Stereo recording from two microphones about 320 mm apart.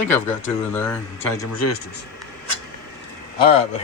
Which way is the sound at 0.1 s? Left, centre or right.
Centre.